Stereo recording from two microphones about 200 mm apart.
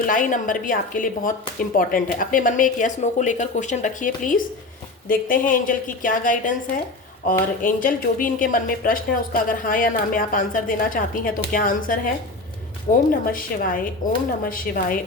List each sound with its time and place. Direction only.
0.0 s a woman's voice: 40° left (ahead or behind)